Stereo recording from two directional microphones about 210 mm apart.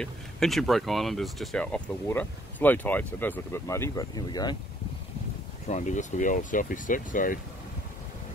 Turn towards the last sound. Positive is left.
turn(degrees=40)  # may be behind; listen again after turning